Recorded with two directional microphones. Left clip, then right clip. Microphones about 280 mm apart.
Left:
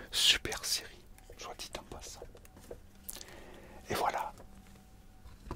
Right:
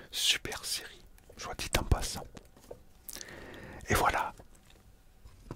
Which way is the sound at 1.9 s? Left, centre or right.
Right.